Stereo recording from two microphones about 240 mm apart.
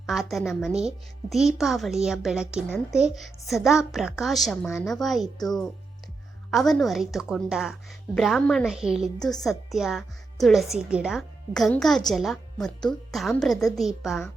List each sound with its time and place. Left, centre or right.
0.0 s speech: centre